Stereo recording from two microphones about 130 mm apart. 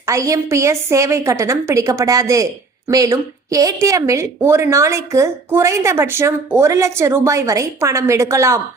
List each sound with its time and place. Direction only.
0.0 s a woman's voice: 25° right (ahead or behind)